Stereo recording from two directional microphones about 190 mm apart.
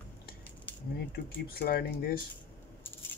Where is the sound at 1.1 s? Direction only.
50° left (ahead or behind).